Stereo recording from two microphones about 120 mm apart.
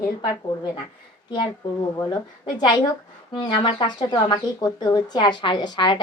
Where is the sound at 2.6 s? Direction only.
40° left (ahead or behind).